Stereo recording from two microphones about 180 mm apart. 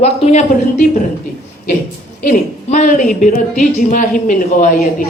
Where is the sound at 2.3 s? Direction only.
45° left (ahead or behind).